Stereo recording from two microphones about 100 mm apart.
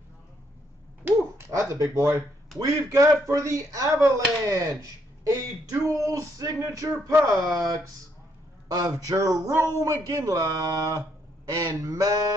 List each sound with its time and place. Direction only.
1.6 s a man's voice: 30° right (ahead or behind)